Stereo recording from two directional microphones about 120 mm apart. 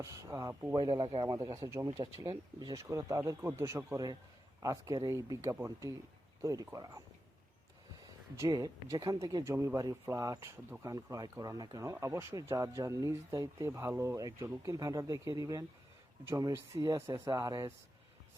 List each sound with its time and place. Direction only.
0.0 s speech: 30° right (ahead or behind)
0.9 s speech: 35° right (ahead or behind)
1.5 s speech: 25° right (ahead or behind)
3.9 s speech: 35° right (ahead or behind)
8.4 s speech: 30° right (ahead or behind)
16.9 s speech: 40° right (ahead or behind)